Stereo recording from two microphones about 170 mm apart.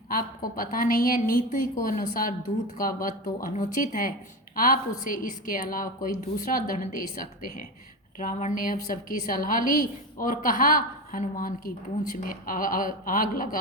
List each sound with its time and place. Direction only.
0.1 s a woman's voice: 55° left (ahead or behind)